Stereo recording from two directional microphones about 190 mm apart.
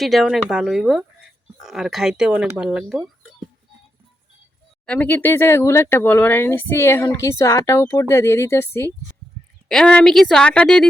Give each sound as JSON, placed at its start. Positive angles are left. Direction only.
{"t": 0.0, "sound": "speech", "side_deg": 0}
{"t": 4.9, "sound": "speech", "side_deg": 10}